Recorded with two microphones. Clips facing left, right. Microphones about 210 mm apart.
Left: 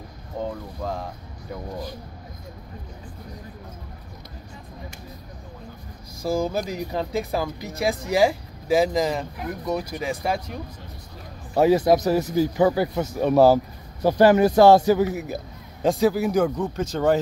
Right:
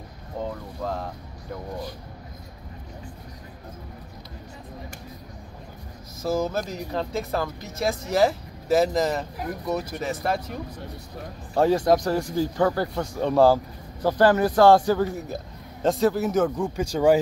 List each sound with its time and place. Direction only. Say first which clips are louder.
6.2 s a man's voice: left 1 dB; centre (ahead or behind); by 7.5 s 15° left (ahead or behind)
8.0 s a man's voice: left 1 dB; centre (ahead or behind)
9.9 s speech: left 1 dB; 5° left (ahead or behind)
11.5 s a man's voice: left 2 dB; 5° left (ahead or behind); by 17.2 s 10° right (ahead or behind)